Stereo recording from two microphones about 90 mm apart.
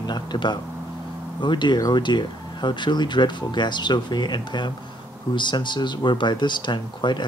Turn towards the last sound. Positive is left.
turn(degrees=60)  # may be behind; listen again after turning